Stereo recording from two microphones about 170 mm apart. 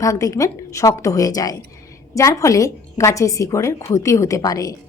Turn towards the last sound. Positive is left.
turn(degrees=20)  # may be behind; listen again after turning